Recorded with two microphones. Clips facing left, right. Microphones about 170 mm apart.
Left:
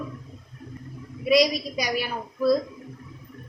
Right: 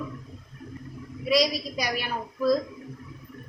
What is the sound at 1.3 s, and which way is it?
Speech, 15° left (ahead or behind).